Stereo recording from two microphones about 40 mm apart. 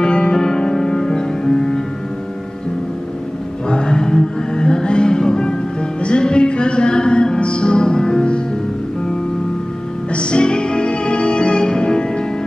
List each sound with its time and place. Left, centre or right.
0.0 s music: centre
3.6 s music: centre
10.1 s music: left